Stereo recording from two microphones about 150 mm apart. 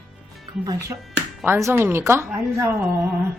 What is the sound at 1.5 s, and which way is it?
Speech, 15° right (ahead or behind).